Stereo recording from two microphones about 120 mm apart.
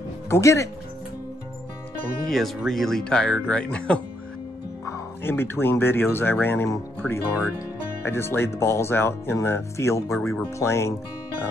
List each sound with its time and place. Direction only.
0.3 s speech: 25° left (ahead or behind)
2.2 s speech: centre (ahead or behind); by 11.0 s 20° left (ahead or behind)